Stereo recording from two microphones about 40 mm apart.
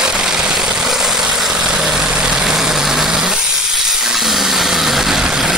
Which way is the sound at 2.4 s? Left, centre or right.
Centre.